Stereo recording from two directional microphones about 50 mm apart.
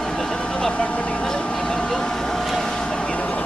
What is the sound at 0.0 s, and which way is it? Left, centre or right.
Vehicle, centre.